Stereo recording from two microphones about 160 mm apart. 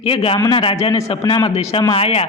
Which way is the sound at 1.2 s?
25° left (ahead or behind).